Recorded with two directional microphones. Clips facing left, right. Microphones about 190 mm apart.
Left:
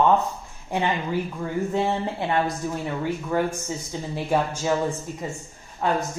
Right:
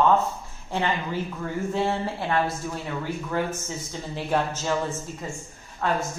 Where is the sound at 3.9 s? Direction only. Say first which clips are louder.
Left 2 dB; 10° left (ahead or behind).